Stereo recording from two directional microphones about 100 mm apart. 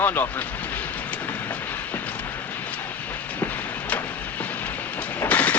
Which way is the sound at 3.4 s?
15° left (ahead or behind).